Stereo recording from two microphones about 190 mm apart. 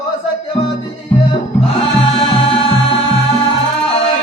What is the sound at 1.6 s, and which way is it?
Music, 30° left (ahead or behind).